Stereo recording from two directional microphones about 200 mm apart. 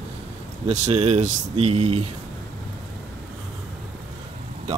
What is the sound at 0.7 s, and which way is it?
Speech, 30° right (ahead or behind).